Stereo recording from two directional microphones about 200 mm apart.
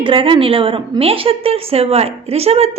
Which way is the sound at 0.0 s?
25° right (ahead or behind).